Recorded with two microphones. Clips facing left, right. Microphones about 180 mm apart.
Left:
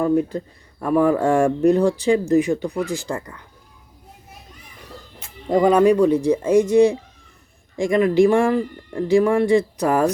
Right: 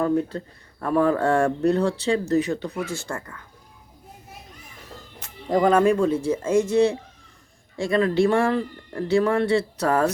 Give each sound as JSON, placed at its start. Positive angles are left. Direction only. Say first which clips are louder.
{"t": 0.0, "sound": "speech", "louder": "left 3 dB", "side_deg": 15}
{"t": 5.2, "sound": "speech", "louder": "left 3 dB", "side_deg": 10}